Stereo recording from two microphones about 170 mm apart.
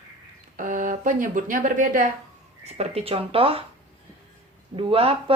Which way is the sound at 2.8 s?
35° right (ahead or behind).